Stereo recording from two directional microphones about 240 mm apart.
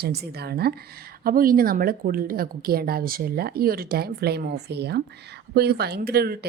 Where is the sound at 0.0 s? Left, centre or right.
Right.